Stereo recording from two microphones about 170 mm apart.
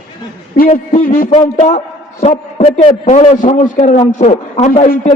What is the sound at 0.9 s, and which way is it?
Speech, 55° left (ahead or behind).